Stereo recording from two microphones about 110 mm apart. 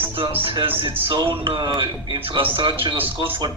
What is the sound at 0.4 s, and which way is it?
Speech, 50° right (ahead or behind).